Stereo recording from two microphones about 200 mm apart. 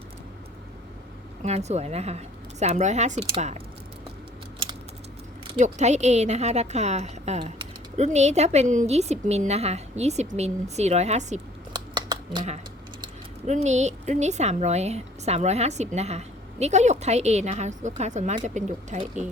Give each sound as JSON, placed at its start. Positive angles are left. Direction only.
{"t": 1.4, "sound": "a woman's voice", "side_deg": -35}
{"t": 5.5, "sound": "a woman's voice", "side_deg": -35}
{"t": 11.7, "sound": "a sound", "side_deg": -20}
{"t": 13.5, "sound": "a woman's voice", "side_deg": -35}